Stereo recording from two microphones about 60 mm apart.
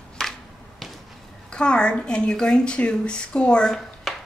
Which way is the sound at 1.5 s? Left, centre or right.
Centre.